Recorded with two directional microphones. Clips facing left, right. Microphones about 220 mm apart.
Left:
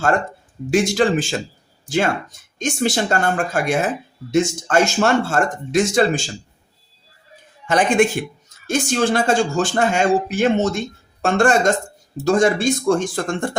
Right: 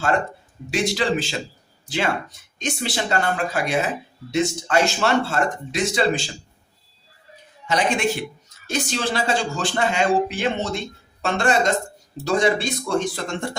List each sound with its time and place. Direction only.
0.7 s speech: 50° left (ahead or behind)
7.7 s speech: 50° left (ahead or behind)